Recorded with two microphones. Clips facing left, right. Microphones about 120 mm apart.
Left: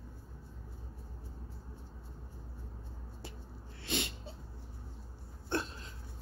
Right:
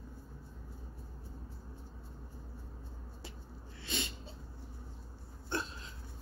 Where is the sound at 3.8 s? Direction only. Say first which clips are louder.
Left 3 dB; 65° left (ahead or behind).